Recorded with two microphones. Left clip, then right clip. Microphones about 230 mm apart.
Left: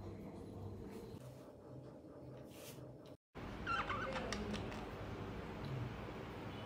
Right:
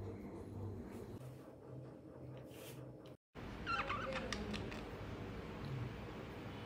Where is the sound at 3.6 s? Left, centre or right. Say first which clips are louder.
Even; centre.